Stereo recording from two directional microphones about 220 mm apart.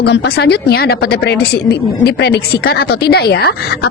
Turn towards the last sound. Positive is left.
turn(degrees=45)  # may be behind; listen again after turning